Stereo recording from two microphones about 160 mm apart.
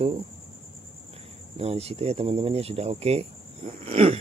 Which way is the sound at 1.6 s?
40° right (ahead or behind).